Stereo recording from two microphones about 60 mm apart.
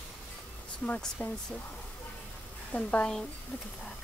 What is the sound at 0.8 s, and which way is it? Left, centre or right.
Speech, centre.